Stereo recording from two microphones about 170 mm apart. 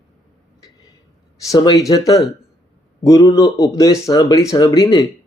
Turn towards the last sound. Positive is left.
turn(degrees=25)  # may be behind; listen again after turning